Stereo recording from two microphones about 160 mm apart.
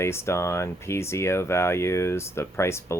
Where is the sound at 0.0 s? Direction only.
15° left (ahead or behind).